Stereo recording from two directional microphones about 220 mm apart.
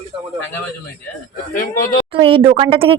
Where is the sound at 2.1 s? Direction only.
25° right (ahead or behind).